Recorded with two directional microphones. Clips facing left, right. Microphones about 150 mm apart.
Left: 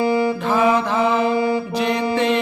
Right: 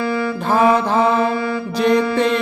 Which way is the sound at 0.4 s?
40° right (ahead or behind).